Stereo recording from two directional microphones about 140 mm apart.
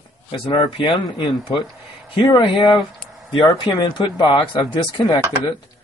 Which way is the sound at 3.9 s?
35° left (ahead or behind).